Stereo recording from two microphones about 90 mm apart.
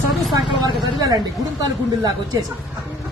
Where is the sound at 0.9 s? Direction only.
40° right (ahead or behind).